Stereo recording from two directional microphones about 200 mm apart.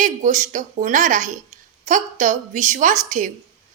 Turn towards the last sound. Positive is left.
turn(degrees=-40)  # may be behind; listen again after turning